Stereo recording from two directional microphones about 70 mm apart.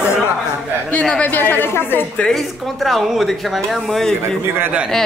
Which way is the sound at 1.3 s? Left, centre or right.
Left.